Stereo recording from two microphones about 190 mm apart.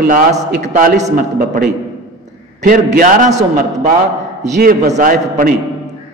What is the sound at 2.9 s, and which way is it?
Speech, 40° right (ahead or behind).